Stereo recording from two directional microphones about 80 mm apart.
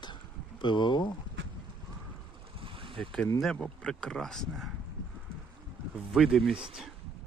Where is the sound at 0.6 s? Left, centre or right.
Left.